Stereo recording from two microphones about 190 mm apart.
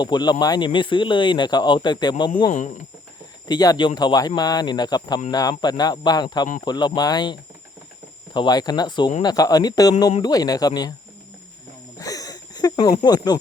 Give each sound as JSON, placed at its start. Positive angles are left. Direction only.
{"t": 0.0, "sound": "speech", "side_deg": 20}
{"t": 2.5, "sound": "speech", "side_deg": 40}
{"t": 3.5, "sound": "speech", "side_deg": 20}
{"t": 11.9, "sound": "wheeze", "side_deg": 20}